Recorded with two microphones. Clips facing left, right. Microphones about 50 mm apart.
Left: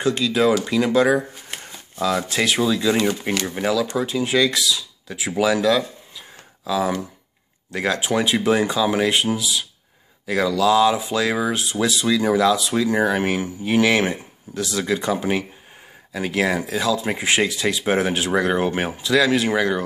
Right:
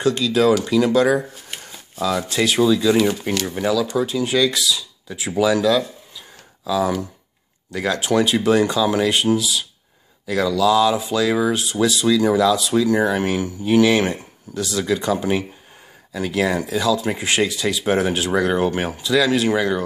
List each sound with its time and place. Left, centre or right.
0.0 s speech: left
2.0 s speech: left
3.3 s speech: left
3.6 s speech: left
8.0 s speech: left